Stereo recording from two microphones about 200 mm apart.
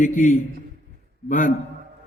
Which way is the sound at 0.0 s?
40° left (ahead or behind).